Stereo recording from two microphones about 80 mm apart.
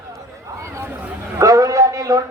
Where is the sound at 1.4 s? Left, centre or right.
Right.